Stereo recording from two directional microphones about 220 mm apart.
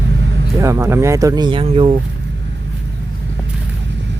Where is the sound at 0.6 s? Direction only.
15° right (ahead or behind).